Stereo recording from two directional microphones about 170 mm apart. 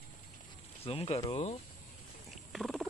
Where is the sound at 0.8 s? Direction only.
35° left (ahead or behind).